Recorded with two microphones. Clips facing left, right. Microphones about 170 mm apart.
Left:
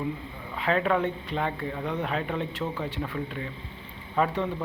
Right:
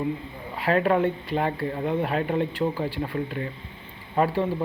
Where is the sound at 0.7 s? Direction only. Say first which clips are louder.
Right 3 dB; 45° right (ahead or behind).